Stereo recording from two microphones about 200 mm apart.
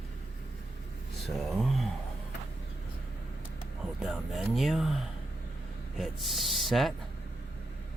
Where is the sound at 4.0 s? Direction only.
Centre (ahead or behind).